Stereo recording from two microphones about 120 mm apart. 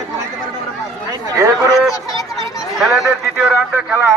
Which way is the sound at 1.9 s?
30° left (ahead or behind).